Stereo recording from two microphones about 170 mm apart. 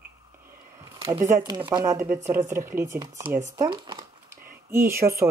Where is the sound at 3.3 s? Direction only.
45° right (ahead or behind).